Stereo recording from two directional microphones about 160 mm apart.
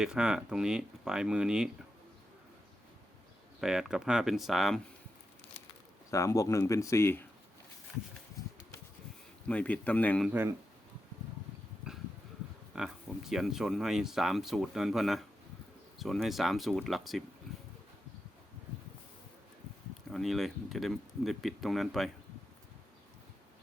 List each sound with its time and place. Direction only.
0.0 s speech: 5° right (ahead or behind)
3.6 s speech: 5° right (ahead or behind)
6.1 s speech: 20° left (ahead or behind)
9.5 s speech: 10° left (ahead or behind)
10.2 s speech: 15° right (ahead or behind)
12.7 s speech: 5° right (ahead or behind)
17.5 s a sound: centre (ahead or behind)
20.1 s speech: centre (ahead or behind)